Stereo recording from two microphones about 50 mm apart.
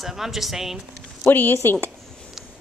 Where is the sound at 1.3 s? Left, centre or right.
Left.